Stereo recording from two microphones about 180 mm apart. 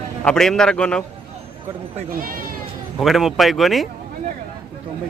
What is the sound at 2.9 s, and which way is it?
Speech, centre (ahead or behind).